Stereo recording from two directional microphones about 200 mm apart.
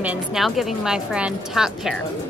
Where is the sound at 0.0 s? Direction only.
5° right (ahead or behind).